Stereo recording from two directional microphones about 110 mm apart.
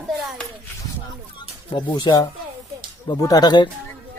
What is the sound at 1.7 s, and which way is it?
Speech, 45° left (ahead or behind).